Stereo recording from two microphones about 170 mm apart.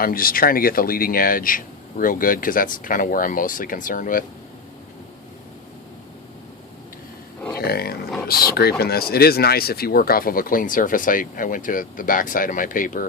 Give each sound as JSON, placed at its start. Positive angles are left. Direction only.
{"t": 0.0, "sound": "speech", "side_deg": 60}
{"t": 7.5, "sound": "roaring cats", "side_deg": 65}
{"t": 8.3, "sound": "speech", "side_deg": 65}